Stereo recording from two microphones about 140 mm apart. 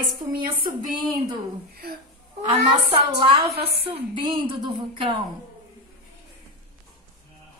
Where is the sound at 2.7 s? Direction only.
35° right (ahead or behind).